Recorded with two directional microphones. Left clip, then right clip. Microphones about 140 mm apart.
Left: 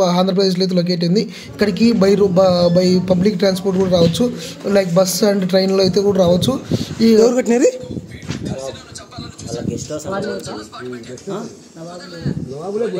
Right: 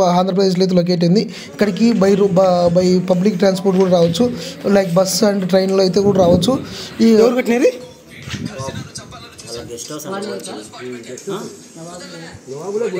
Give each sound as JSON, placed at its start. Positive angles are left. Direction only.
{"t": 0.0, "sound": "a man's voice", "side_deg": -10}
{"t": 7.2, "sound": "speech", "side_deg": 55}